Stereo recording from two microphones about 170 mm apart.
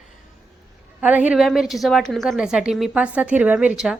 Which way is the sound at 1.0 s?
10° right (ahead or behind).